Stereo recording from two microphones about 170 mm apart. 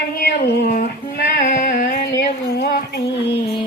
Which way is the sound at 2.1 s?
70° left (ahead or behind).